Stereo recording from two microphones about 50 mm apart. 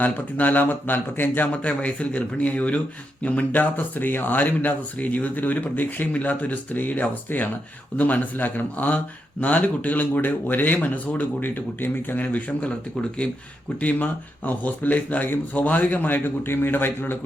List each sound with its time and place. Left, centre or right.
0.0 s speech: left
1.6 s speech: left
13.8 s speech: left